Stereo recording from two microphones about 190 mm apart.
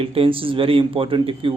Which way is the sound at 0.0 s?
30° right (ahead or behind).